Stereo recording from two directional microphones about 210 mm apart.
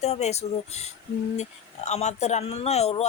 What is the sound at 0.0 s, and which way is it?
Speech, 30° left (ahead or behind).